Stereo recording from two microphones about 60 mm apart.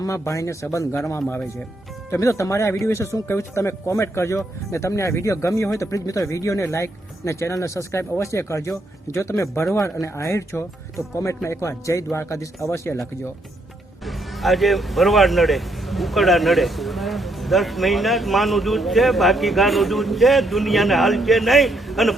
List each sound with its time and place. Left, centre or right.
0.0 s speech: left
2.1 s speech: left
14.0 s speech: centre